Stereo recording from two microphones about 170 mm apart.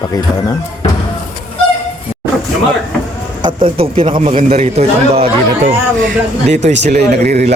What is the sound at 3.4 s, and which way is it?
A man's voice, 30° right (ahead or behind).